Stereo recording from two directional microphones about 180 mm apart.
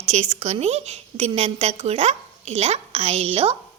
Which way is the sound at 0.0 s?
40° right (ahead or behind).